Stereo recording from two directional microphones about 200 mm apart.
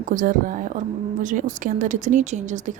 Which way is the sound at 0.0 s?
40° right (ahead or behind).